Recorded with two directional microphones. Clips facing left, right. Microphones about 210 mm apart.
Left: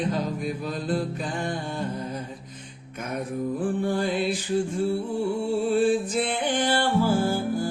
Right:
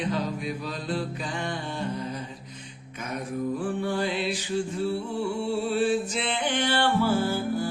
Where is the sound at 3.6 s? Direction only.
50° left (ahead or behind).